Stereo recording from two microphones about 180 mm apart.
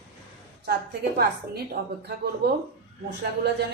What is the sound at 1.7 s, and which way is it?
Speech, 60° right (ahead or behind).